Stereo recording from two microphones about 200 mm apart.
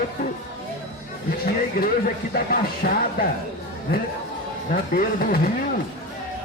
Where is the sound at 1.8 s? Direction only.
50° left (ahead or behind).